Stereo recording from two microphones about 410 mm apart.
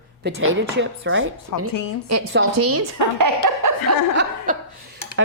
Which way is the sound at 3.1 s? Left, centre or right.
Right.